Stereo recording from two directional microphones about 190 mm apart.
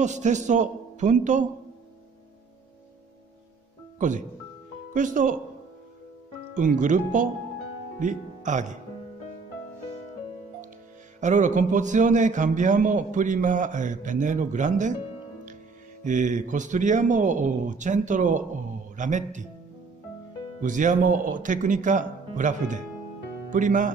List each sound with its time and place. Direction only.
0.0 s a man's voice: 40° right (ahead or behind)
4.0 s a man's voice: 40° right (ahead or behind)
6.5 s speech: 45° right (ahead or behind)
11.1 s a man's voice: 40° right (ahead or behind)
16.0 s a man's voice: 40° right (ahead or behind)
20.6 s speech: 40° right (ahead or behind)